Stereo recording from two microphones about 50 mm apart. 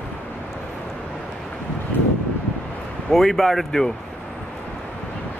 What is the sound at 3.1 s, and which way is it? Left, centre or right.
Speech, centre.